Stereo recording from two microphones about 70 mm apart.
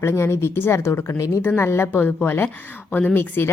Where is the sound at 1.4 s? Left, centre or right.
Left.